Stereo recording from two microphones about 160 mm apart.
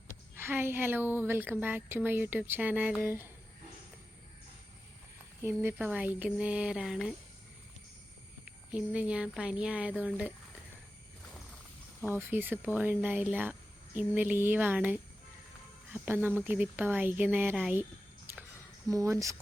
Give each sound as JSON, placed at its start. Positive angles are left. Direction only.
{"t": 0.3, "sound": "speech", "side_deg": -15}
{"t": 5.6, "sound": "speech", "side_deg": -10}
{"t": 8.7, "sound": "speech", "side_deg": -10}
{"t": 12.1, "sound": "speech", "side_deg": -15}
{"t": 18.9, "sound": "speech", "side_deg": -20}